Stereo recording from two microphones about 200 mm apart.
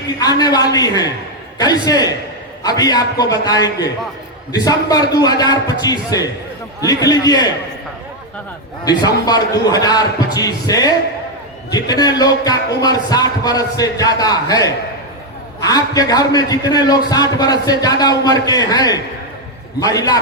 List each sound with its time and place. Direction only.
0.2 s a man's voice: 20° left (ahead or behind)
8.8 s a man's voice: 20° left (ahead or behind)